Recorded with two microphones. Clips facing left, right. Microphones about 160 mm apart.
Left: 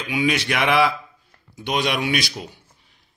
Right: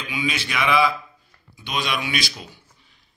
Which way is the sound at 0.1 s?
65° left (ahead or behind).